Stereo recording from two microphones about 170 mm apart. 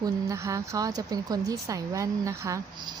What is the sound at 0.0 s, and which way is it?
Speech, 20° right (ahead or behind).